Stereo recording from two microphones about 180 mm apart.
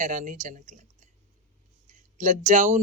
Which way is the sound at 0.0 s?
45° right (ahead or behind).